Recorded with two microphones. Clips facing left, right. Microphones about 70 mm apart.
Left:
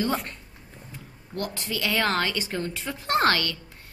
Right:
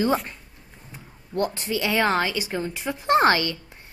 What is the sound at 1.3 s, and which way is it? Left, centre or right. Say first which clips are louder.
A woman's voice: right 6 dB; right.